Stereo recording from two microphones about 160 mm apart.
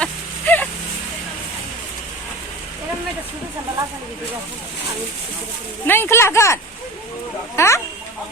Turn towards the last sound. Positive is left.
turn(degrees=20)  # may be behind; listen again after turning